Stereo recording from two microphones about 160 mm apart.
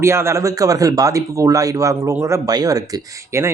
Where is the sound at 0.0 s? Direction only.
15° right (ahead or behind).